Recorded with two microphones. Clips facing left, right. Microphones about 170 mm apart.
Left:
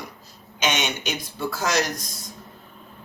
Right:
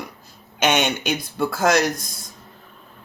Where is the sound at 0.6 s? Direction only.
55° right (ahead or behind).